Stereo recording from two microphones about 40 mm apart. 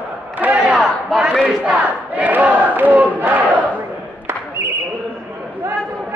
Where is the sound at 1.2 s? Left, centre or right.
Right.